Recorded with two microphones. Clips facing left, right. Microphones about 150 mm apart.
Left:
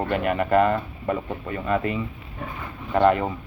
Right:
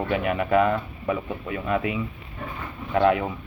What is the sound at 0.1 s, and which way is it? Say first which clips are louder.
Speech: left 1 dB; centre (ahead or behind).